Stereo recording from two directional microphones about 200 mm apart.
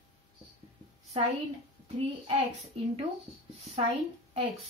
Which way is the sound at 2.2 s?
30° right (ahead or behind).